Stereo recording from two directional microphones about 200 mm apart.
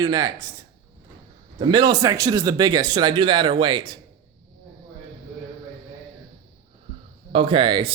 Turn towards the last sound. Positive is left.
turn(degrees=-25)  # may be behind; listen again after turning